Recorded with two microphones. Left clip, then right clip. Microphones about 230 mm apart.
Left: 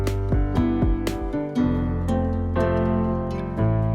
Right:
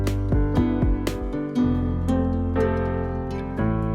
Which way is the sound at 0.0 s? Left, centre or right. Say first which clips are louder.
Right 1 dB; centre.